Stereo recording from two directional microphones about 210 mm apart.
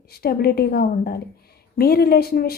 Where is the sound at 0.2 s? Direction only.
45° left (ahead or behind).